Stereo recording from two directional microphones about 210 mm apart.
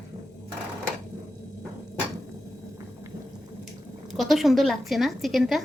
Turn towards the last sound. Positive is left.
turn(degrees=0)  # may be behind; listen again after turning